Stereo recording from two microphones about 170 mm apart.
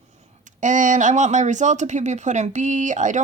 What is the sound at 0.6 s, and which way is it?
Speech, 50° right (ahead or behind).